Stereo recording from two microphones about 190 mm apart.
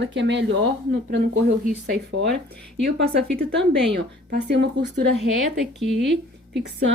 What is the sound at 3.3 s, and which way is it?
A woman's voice, 65° right (ahead or behind).